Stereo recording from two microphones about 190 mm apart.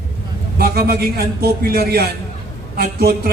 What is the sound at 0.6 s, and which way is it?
A man's voice, 55° right (ahead or behind).